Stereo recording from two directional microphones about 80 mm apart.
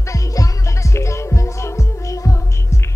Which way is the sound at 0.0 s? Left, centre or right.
Left.